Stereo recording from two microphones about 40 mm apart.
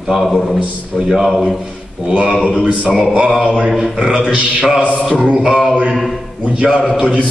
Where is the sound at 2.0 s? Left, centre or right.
Right.